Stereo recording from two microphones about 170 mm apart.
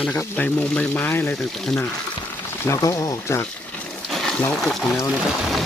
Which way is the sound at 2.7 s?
20° left (ahead or behind).